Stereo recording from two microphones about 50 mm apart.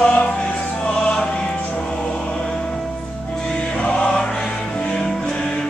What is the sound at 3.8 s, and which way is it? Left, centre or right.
Music, centre.